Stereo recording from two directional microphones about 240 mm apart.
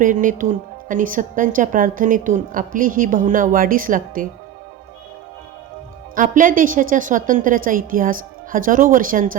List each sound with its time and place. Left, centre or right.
0.0 s speech: right
6.1 s speech: right